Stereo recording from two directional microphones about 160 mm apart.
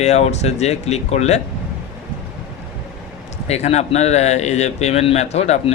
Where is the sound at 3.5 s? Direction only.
45° left (ahead or behind).